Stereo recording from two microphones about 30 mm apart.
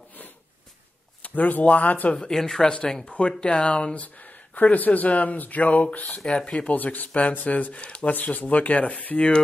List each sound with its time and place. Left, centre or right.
1.2 s speech: left
2.2 s speech: left
3.1 s speech: left
3.9 s speech: left
6.2 s speech: left
6.7 s speech: left
7.2 s speech: left
7.7 s speech: left
8.4 s speech: left